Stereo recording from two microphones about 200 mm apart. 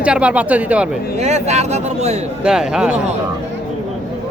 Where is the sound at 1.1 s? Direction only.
35° right (ahead or behind).